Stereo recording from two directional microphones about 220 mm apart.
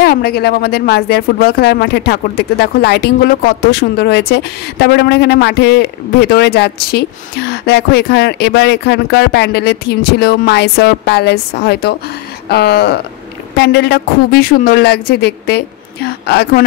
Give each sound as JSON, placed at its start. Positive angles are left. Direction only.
{"t": 0.0, "sound": "speech", "side_deg": 45}